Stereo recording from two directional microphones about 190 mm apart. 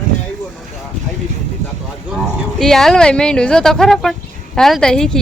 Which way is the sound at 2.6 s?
Centre (ahead or behind).